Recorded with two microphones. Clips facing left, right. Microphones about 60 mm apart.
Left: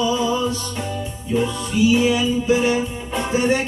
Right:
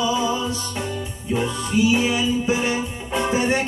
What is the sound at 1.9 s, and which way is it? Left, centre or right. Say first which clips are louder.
Music: left 3 dB; right.